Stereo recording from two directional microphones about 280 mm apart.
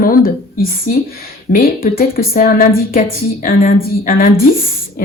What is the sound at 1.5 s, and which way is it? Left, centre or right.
Speech, left.